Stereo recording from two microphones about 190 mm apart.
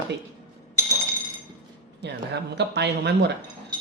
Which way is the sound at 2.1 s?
60° right (ahead or behind).